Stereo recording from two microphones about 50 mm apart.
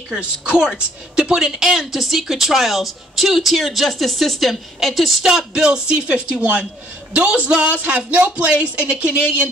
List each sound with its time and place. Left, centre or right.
0.2 s a woman's voice: centre